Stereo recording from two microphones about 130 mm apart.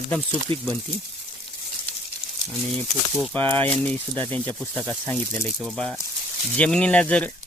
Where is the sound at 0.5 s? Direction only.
40° right (ahead or behind).